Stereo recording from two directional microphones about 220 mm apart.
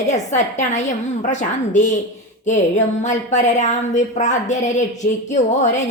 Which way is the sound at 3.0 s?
35° left (ahead or behind).